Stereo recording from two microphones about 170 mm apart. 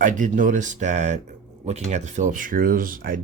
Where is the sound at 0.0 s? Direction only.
50° right (ahead or behind).